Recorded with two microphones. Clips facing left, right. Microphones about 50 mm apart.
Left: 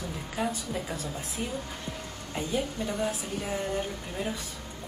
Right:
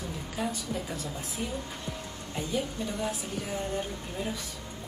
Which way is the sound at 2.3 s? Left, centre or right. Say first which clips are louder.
Left 1 dB; left.